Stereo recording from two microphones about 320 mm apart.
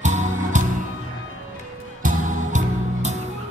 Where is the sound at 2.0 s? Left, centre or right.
Right.